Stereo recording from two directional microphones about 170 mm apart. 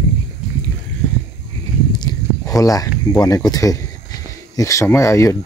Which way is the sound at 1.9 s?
25° left (ahead or behind).